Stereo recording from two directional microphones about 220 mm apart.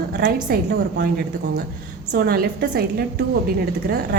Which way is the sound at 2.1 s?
45° right (ahead or behind).